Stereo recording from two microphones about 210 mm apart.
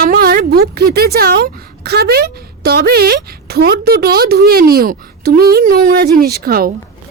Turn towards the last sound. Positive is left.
turn(degrees=-45)  # may be behind; listen again after turning